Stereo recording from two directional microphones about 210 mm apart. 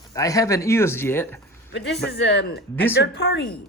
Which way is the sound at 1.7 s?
55° left (ahead or behind).